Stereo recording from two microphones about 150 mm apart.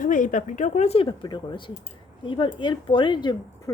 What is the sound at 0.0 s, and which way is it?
A woman's voice, 60° left (ahead or behind).